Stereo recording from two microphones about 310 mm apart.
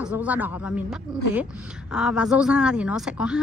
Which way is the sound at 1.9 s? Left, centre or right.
Centre.